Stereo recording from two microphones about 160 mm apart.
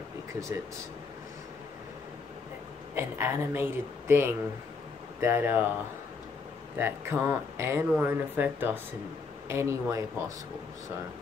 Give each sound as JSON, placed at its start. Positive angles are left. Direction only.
{"t": 2.9, "sound": "speech", "side_deg": -15}
{"t": 6.8, "sound": "speech", "side_deg": -15}